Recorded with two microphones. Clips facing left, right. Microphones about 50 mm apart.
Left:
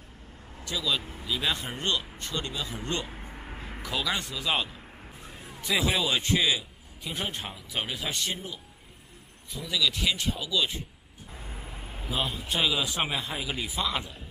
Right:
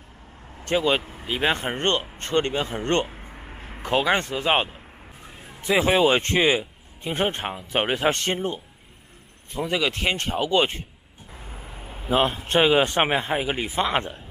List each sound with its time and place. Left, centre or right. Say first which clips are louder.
0.7 s a man's voice: right 9 dB; right
3.1 s a sound: right 1 dB; centre
3.8 s a man's voice: right 9 dB; right
12.1 s a man's voice: right 10 dB; right